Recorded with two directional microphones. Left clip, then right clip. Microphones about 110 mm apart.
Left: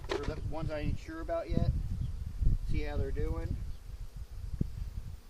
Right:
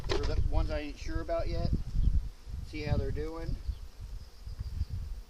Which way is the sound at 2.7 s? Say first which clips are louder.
Right 3 dB; 5° right (ahead or behind).